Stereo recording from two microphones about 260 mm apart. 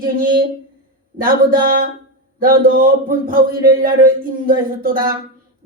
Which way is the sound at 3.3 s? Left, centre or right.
Right.